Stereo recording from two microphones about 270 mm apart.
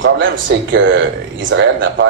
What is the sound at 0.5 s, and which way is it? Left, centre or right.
A man's voice, right.